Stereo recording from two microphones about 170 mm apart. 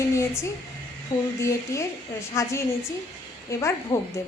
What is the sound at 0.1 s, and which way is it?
A woman's voice, 15° left (ahead or behind).